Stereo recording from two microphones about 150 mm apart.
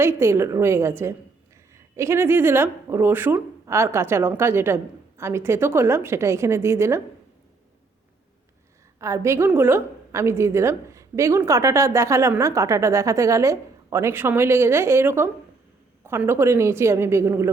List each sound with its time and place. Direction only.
0.0 s a woman's voice: 20° right (ahead or behind)
9.0 s a woman's voice: 20° right (ahead or behind)